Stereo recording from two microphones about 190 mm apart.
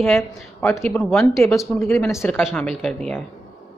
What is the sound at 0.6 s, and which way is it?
Speech, 10° left (ahead or behind).